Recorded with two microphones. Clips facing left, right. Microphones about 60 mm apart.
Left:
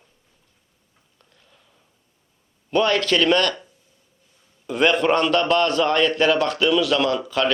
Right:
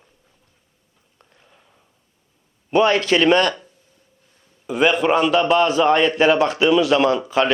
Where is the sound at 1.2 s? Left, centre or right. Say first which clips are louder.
Right 4 dB; right.